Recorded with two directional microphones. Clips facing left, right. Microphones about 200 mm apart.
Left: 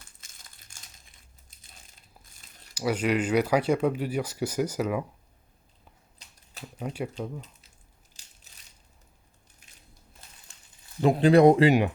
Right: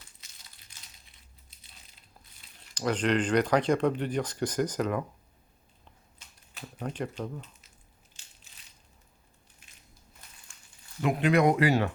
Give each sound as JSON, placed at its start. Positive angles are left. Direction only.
{"t": 0.0, "sound": "crumpling", "side_deg": 50}
{"t": 2.7, "sound": "speech", "side_deg": 10}
{"t": 6.1, "sound": "a sound", "side_deg": 35}
{"t": 6.7, "sound": "speech", "side_deg": 10}
{"t": 10.5, "sound": "a sound", "side_deg": 35}
{"t": 11.0, "sound": "speech", "side_deg": 30}